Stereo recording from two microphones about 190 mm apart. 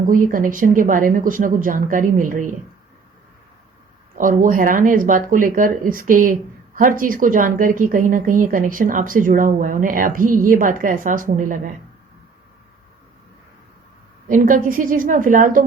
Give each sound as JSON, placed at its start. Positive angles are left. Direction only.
{"t": 0.0, "sound": "speech", "side_deg": -45}
{"t": 4.1, "sound": "speech", "side_deg": -45}
{"t": 14.3, "sound": "speech", "side_deg": -45}